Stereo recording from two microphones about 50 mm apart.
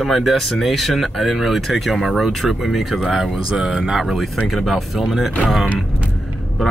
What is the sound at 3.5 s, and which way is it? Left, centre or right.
Speech, centre.